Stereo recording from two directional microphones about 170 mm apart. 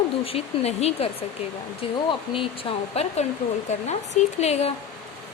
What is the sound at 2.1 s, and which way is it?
Speech, 30° left (ahead or behind).